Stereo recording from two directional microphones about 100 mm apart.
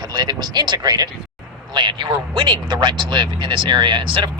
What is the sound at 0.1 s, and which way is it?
Speech, 40° right (ahead or behind).